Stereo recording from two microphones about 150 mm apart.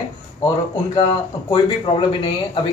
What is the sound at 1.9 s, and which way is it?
Speech, 35° left (ahead or behind).